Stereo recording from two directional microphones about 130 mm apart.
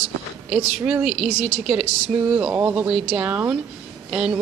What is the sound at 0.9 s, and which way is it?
A woman's voice, 10° right (ahead or behind).